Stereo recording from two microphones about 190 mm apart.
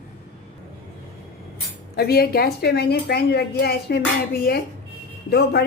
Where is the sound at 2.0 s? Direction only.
55° left (ahead or behind).